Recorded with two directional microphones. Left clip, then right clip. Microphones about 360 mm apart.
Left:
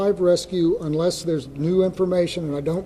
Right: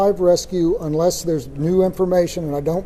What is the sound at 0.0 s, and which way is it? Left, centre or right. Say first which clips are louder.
A man's voice: right 3 dB; centre.